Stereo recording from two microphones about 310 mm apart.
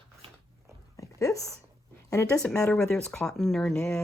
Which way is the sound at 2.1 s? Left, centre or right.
Centre.